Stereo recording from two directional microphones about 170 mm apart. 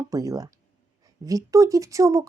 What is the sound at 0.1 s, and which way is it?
A woman's voice, 20° right (ahead or behind).